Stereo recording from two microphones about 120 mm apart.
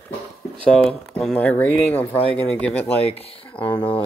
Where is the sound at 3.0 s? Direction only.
55° left (ahead or behind).